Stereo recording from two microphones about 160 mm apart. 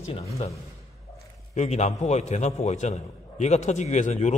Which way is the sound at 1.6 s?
45° left (ahead or behind).